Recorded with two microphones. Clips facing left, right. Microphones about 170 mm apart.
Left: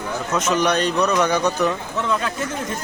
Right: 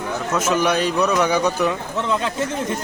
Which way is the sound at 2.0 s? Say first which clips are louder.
Right 1 dB; 25° right (ahead or behind).